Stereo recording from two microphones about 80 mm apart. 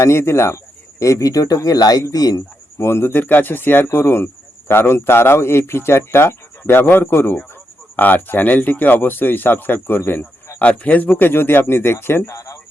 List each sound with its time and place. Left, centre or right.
0.0 s speech: left
2.7 s a man's voice: left